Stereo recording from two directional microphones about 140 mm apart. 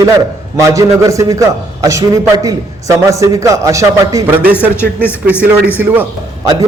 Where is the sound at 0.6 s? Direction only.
20° right (ahead or behind).